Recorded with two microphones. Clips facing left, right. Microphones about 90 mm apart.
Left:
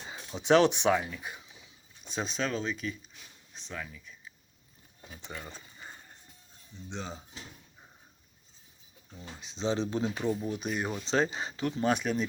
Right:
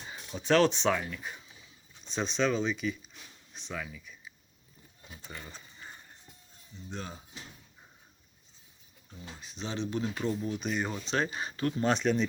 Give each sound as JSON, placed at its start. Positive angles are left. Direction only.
{"t": 0.1, "sound": "speech", "side_deg": 20}
{"t": 5.3, "sound": "speech", "side_deg": 50}
{"t": 6.9, "sound": "speech", "side_deg": 20}
{"t": 9.4, "sound": "speech", "side_deg": 25}
{"t": 10.4, "sound": "speech", "side_deg": 5}
{"t": 11.1, "sound": "speech", "side_deg": 30}
{"t": 11.8, "sound": "speech", "side_deg": 10}